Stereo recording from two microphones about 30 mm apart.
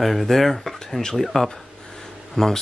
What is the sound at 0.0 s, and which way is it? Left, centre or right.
Speech, centre.